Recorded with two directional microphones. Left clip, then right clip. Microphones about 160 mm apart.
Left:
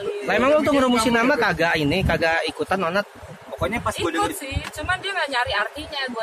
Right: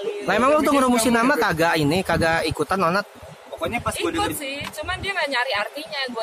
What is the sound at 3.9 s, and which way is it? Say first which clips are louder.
Speech: left 1 dB; 10° right (ahead or behind).